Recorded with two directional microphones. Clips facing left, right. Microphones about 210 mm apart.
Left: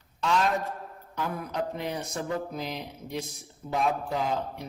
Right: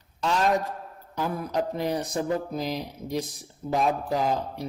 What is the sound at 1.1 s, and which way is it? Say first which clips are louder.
A man's voice: right 4 dB; 35° right (ahead or behind).